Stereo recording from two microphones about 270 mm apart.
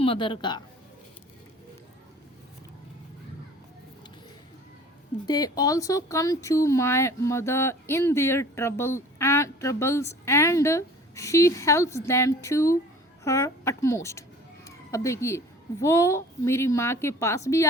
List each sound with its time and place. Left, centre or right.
0.0 s speech: centre
5.2 s a child's voice: centre